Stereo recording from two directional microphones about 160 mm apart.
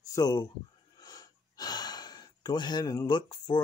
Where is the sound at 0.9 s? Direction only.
25° left (ahead or behind).